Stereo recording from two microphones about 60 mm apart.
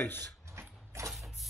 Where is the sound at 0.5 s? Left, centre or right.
Right.